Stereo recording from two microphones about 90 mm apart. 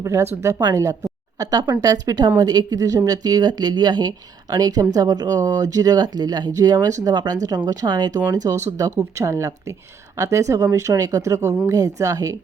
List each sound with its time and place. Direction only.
0.0 s speech: 35° right (ahead or behind)
0.6 s speech: 45° right (ahead or behind)
8.5 s speech: 35° right (ahead or behind)